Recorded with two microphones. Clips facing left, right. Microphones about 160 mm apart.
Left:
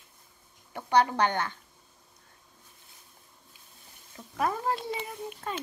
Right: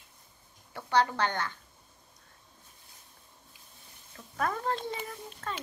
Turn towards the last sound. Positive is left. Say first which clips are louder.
# left 3 dB
turn(degrees=15)  # may be behind; listen again after turning